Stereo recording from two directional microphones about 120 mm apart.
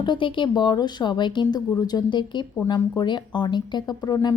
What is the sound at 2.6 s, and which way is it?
Speech, 35° left (ahead or behind).